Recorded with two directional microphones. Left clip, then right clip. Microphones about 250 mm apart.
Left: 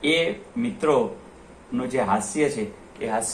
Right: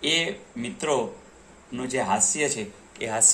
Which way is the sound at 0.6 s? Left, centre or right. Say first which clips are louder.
Left 5 dB; right.